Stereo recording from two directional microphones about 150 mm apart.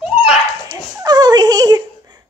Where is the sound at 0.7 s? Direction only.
25° right (ahead or behind).